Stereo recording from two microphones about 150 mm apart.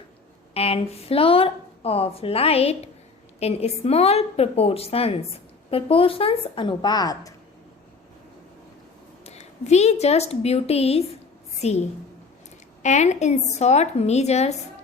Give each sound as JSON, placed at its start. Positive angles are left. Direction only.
{"t": 0.5, "sound": "a woman's voice", "side_deg": 40}
{"t": 9.2, "sound": "a woman's voice", "side_deg": 45}